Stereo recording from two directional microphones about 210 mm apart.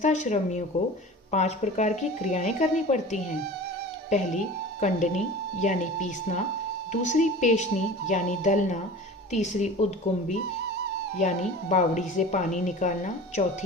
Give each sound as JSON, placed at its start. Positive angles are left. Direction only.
{"t": 0.0, "sound": "a woman's voice", "side_deg": 35}
{"t": 11.2, "sound": "a woman's voice", "side_deg": 35}